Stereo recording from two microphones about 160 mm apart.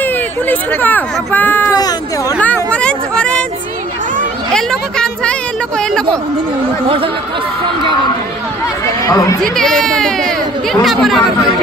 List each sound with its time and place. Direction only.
0.0 s speech: 10° left (ahead or behind)
1.8 s speech: 25° left (ahead or behind)
2.4 s a sound: 10° left (ahead or behind)
4.5 s speech: 5° left (ahead or behind)
8.8 s speech: 20° left (ahead or behind)
9.4 s speech: centre (ahead or behind)